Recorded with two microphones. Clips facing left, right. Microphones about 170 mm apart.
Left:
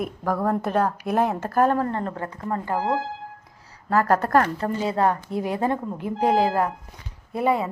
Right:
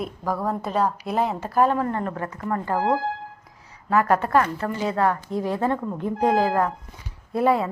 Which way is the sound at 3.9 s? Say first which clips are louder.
Even; 40° left (ahead or behind).